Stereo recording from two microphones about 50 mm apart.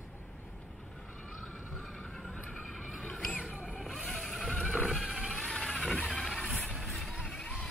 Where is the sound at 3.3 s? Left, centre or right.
Centre.